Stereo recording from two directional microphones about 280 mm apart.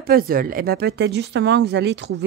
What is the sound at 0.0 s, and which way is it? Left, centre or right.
Speech, right.